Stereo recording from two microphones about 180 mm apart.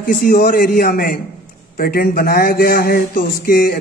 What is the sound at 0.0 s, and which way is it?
A man's voice, 50° left (ahead or behind).